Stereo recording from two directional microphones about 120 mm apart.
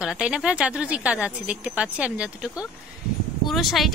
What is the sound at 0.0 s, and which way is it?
Speech, 5° right (ahead or behind).